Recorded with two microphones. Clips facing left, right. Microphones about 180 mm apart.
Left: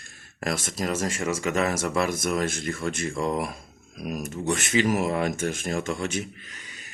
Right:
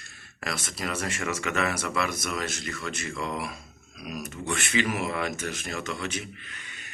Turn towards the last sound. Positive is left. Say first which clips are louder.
# even
turn(degrees=40)  # may be behind; listen again after turning